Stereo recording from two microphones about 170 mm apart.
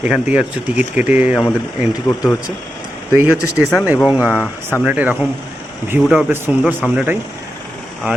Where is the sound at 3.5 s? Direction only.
5° right (ahead or behind).